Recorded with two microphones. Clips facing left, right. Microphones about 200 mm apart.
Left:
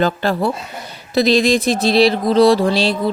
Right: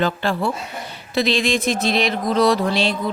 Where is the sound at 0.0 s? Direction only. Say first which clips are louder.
Left 4 dB; 40° left (ahead or behind).